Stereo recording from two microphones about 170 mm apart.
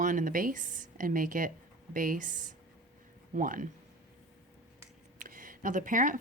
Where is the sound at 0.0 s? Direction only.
50° right (ahead or behind).